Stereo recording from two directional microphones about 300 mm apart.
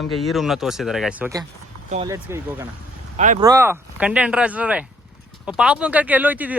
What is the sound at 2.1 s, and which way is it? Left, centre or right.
Speech, centre.